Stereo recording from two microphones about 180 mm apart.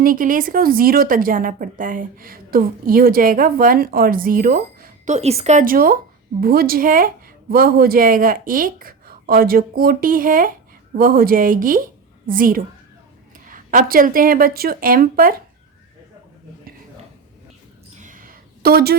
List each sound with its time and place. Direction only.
0.0 s a woman's voice: 50° right (ahead or behind)
5.1 s a woman's voice: 35° right (ahead or behind); by 15.4 s 55° right (ahead or behind)
17.9 s a sound: 45° right (ahead or behind)